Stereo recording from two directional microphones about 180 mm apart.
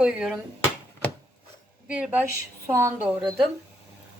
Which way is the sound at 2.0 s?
10° right (ahead or behind).